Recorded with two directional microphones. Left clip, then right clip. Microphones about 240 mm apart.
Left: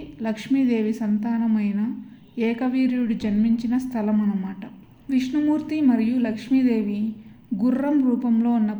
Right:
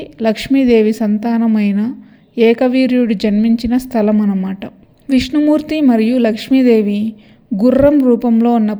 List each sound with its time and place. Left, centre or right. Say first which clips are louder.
0.0 s a woman's voice: right 13 dB; right